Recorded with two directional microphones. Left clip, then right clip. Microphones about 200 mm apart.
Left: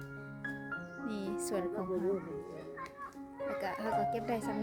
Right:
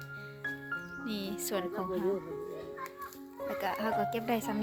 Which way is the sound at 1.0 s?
10° left (ahead or behind).